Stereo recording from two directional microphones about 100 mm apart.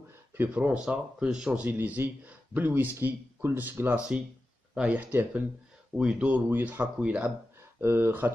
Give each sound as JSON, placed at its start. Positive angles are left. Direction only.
{"t": 0.4, "sound": "speech", "side_deg": -10}
{"t": 7.8, "sound": "speech", "side_deg": -25}